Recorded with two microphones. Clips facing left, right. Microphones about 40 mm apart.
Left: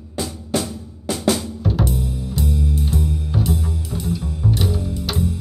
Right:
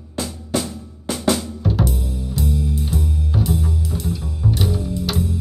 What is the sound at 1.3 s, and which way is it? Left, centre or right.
Music, centre.